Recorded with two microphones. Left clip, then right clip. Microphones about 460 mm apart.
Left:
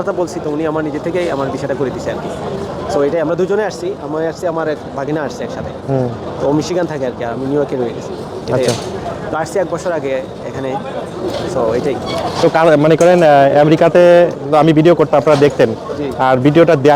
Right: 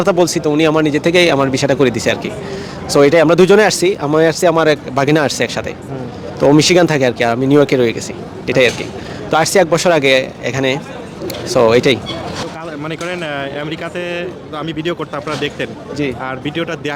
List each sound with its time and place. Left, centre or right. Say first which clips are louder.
0.0 s speech: right 5 dB; right
6.6 s speech: right 6 dB; right
9.3 s speech: right 7 dB; right
12.5 s speech: left 16 dB; left